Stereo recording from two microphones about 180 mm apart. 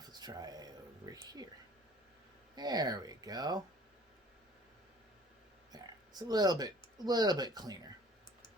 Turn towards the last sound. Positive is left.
turn(degrees=-20)  # may be behind; listen again after turning